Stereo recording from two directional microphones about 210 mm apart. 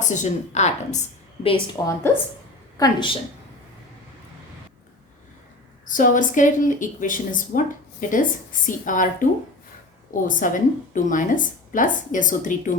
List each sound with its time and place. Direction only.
0.0 s a woman's voice: 35° left (ahead or behind)
2.7 s speech: 15° left (ahead or behind)
5.8 s a woman's voice: 40° left (ahead or behind)
10.2 s a woman's voice: 40° left (ahead or behind)